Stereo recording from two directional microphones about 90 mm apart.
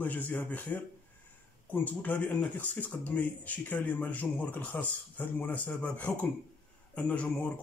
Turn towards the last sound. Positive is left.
turn(degrees=15)  # may be behind; listen again after turning